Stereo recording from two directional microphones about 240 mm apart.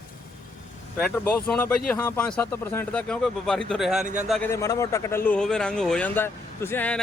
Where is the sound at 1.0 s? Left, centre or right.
Centre.